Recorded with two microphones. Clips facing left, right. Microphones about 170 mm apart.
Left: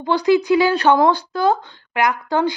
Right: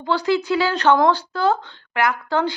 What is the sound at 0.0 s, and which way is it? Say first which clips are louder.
A woman's voice: left 4 dB; 15° left (ahead or behind).